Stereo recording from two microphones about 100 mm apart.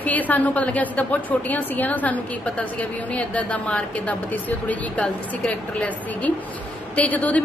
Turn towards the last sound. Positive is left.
turn(degrees=15)  # may be behind; listen again after turning